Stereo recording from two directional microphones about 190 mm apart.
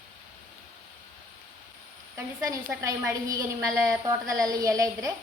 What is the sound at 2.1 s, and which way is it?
A woman's voice, 15° right (ahead or behind).